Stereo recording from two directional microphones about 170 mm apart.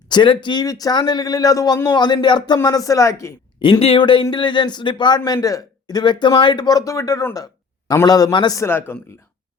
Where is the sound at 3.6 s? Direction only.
30° left (ahead or behind).